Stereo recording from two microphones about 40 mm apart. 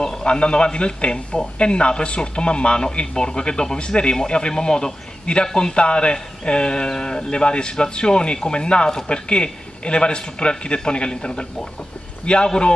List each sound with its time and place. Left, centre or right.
0.0 s a man's voice: centre